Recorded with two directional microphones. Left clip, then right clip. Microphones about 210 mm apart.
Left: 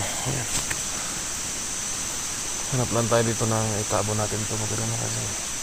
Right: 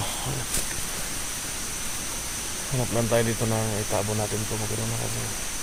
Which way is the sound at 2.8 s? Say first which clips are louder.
Left 1 dB; 25° left (ahead or behind).